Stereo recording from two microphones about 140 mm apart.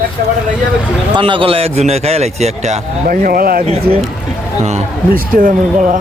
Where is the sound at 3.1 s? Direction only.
85° right.